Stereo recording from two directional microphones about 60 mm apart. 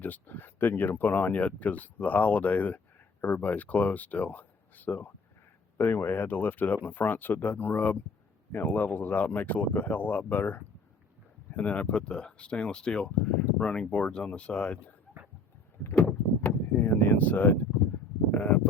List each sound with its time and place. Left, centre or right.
0.0 s speech: left
5.7 s speech: left; by 14.9 s centre
15.8 s speech: left
16.5 s vehicle: left
18.3 s a sound: left